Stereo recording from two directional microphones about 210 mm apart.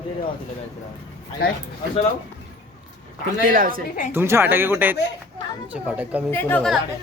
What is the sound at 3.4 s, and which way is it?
Speech, 40° right (ahead or behind).